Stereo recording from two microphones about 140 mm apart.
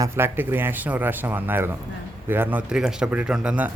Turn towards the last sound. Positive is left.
turn(degrees=-5)  # may be behind; listen again after turning